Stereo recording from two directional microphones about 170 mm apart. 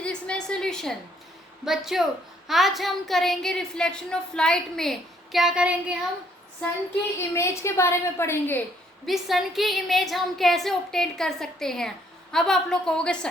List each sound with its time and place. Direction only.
0.0 s a sound: 5° left (ahead or behind)
1.6 s a woman's voice: centre (ahead or behind)
7.2 s a woman's voice: 15° left (ahead or behind)
9.0 s a woman's voice: centre (ahead or behind)